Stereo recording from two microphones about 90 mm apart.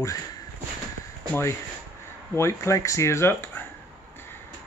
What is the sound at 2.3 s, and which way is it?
Speech, 30° left (ahead or behind).